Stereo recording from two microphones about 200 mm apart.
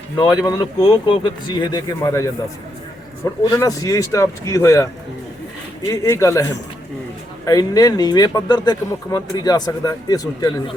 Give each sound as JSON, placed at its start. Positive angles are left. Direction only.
{"t": 0.2, "sound": "speech", "side_deg": 20}
{"t": 3.4, "sound": "speech", "side_deg": 15}
{"t": 5.9, "sound": "speech", "side_deg": 15}
{"t": 7.4, "sound": "speech", "side_deg": 20}